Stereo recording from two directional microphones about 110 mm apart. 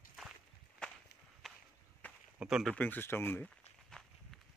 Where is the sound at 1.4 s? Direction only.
Centre (ahead or behind).